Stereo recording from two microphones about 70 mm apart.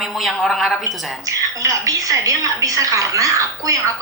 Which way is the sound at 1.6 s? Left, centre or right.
Right.